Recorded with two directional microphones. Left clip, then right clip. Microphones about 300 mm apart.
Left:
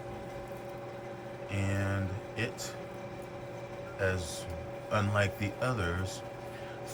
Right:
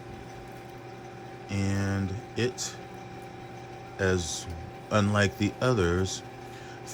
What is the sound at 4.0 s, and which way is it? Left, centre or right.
Speech, right.